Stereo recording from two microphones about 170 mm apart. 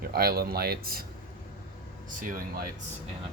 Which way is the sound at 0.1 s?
65° right (ahead or behind).